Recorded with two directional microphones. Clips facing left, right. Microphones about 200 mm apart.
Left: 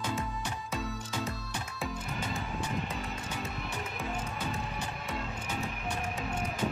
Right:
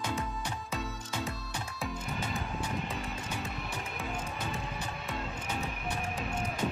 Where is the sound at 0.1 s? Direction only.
Centre (ahead or behind).